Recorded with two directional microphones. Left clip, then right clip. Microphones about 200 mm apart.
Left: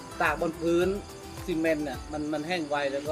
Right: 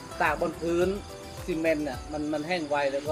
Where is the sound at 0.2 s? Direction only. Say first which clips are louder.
Even; 15° left (ahead or behind).